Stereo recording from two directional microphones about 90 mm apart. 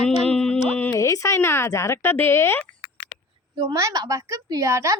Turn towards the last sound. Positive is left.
turn(degrees=-35)  # may be behind; listen again after turning